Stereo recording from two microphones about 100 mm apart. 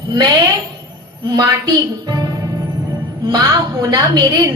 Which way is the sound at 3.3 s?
40° right (ahead or behind).